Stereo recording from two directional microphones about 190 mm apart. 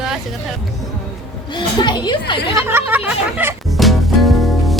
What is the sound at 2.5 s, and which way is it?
A woman's voice, 10° right (ahead or behind).